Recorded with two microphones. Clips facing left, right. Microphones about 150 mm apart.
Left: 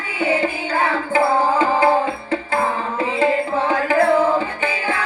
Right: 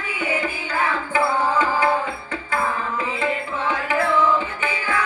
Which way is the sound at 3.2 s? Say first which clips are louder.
Left 10 dB; 35° left (ahead or behind).